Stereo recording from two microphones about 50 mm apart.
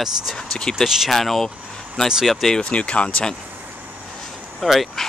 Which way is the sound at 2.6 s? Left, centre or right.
Left.